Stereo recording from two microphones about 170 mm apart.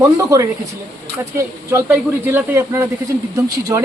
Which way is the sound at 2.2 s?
15° right (ahead or behind).